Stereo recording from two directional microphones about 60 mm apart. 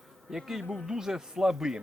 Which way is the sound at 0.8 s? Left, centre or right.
Centre.